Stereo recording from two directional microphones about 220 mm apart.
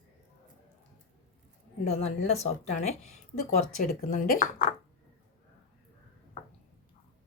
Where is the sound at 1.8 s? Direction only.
30° left (ahead or behind).